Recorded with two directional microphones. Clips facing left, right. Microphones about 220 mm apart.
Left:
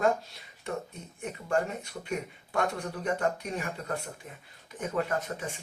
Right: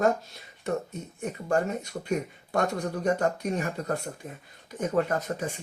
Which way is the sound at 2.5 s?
40° right (ahead or behind).